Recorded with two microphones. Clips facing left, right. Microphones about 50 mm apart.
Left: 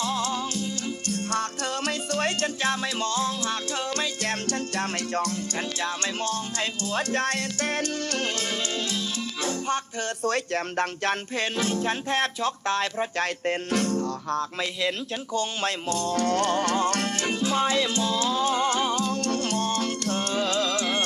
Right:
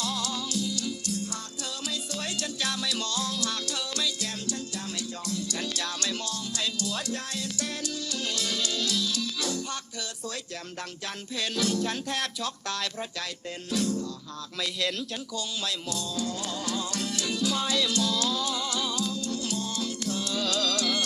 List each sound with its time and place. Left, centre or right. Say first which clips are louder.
0.0 s music: left 5 dB; left
2.6 s music: left 5 dB; left
10.2 s speech: left 11 dB; left
11.5 s music: even; left
14.6 s speech: left 3 dB; left
15.3 s music: left 9 dB; left
19.1 s music: left 5 dB; left
20.4 s music: left 1 dB; left